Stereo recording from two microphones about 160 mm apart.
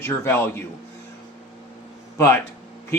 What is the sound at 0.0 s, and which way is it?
Speech, 15° left (ahead or behind).